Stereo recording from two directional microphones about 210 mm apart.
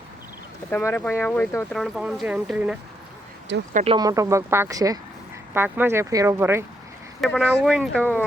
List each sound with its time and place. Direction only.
0.7 s speech: 10° left (ahead or behind)
3.7 s speech: 35° right (ahead or behind)
3.9 s speech: 15° right (ahead or behind)
7.2 s speech: centre (ahead or behind)